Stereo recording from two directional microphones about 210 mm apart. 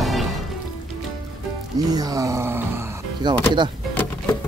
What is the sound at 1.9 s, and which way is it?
Speech, 20° right (ahead or behind).